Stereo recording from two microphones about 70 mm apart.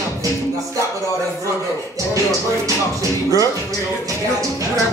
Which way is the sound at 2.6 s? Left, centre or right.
Right.